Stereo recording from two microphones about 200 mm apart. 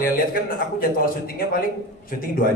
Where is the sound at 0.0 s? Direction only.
45° left (ahead or behind).